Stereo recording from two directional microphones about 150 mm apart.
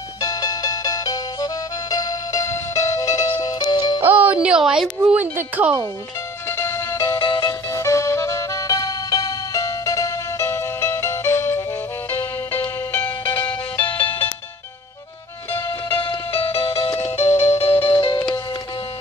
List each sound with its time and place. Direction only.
0.2 s music: 25° left (ahead or behind)
4.0 s a sound: 10° right (ahead or behind)
6.5 s music: 20° left (ahead or behind)
7.2 s music: 30° left (ahead or behind)
7.7 s music: 20° left (ahead or behind)
13.5 s music: 35° left (ahead or behind)
15.9 s music: 30° left (ahead or behind)